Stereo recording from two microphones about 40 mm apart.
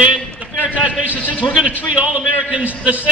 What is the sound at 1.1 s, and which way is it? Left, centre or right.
Speech, left.